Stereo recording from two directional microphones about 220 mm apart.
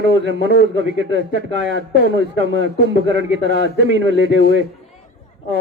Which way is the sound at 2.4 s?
55° right (ahead or behind).